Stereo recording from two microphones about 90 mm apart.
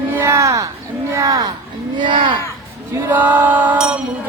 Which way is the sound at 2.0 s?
60° right (ahead or behind).